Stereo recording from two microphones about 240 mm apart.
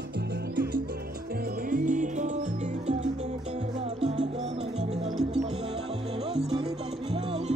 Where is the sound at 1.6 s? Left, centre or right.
Right.